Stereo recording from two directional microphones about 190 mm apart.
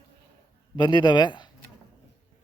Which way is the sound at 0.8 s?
25° left (ahead or behind).